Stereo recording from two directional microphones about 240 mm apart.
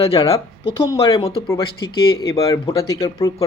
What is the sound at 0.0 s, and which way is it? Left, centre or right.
Speech, left.